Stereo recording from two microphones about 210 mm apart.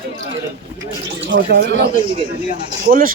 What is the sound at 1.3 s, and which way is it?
Speech, 45° right (ahead or behind).